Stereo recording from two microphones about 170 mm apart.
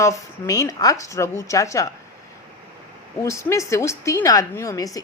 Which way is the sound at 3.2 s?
15° left (ahead or behind).